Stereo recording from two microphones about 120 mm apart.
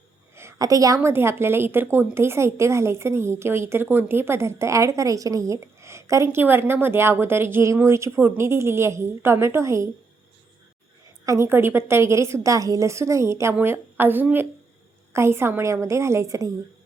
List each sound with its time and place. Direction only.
0.3 s a woman's voice: 25° right (ahead or behind)
11.3 s a woman's voice: 20° right (ahead or behind)